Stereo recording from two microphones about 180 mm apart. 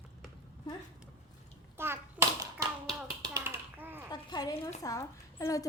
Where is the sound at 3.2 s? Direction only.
15° right (ahead or behind).